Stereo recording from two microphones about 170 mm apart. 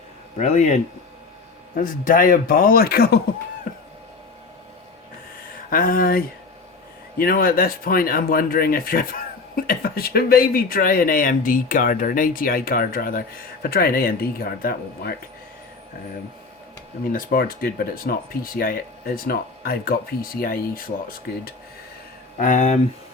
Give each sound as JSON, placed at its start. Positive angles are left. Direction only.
{"t": 0.3, "sound": "speech", "side_deg": 45}
{"t": 3.7, "sound": "a sound", "side_deg": 55}
{"t": 5.7, "sound": "speech", "side_deg": 55}
{"t": 17.1, "sound": "speech", "side_deg": 55}
{"t": 22.4, "sound": "speech", "side_deg": 50}